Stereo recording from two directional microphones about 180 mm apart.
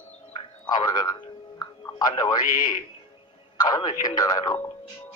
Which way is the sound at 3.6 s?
20° left (ahead or behind).